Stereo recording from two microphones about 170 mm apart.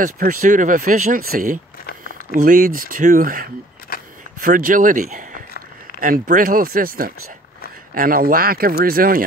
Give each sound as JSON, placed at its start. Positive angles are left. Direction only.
{"t": 0.0, "sound": "speech", "side_deg": -55}
{"t": 3.9, "sound": "single-lens reflex camera", "side_deg": 60}
{"t": 4.4, "sound": "speech", "side_deg": -55}